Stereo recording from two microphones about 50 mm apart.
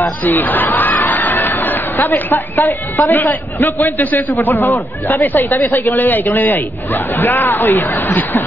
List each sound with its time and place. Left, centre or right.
0.0 s a man's voice: left